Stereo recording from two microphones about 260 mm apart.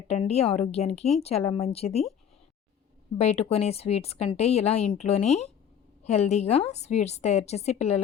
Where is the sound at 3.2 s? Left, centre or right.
Left.